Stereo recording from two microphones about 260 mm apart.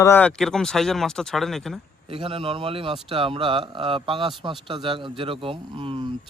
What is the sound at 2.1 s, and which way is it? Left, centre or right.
Speech, centre.